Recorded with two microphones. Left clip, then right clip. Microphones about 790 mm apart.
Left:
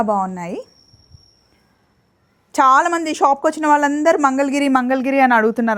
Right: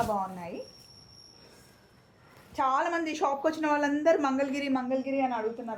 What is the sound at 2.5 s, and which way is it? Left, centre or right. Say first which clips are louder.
Speech: left 14 dB; left.